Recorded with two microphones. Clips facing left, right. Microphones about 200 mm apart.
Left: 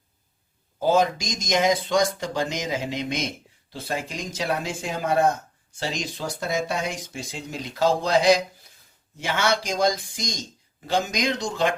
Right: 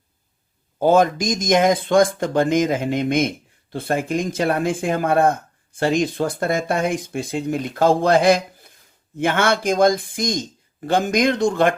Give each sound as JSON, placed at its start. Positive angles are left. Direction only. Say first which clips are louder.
{"t": 0.8, "sound": "speech", "louder": "right 5 dB", "side_deg": -55}